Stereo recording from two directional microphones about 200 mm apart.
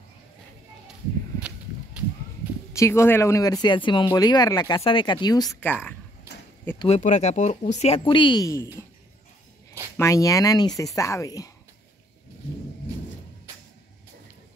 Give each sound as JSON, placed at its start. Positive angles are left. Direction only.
{"t": 2.8, "sound": "speech", "side_deg": 15}
{"t": 5.6, "sound": "speech", "side_deg": 5}
{"t": 6.8, "sound": "speech", "side_deg": 35}
{"t": 9.9, "sound": "speech", "side_deg": 15}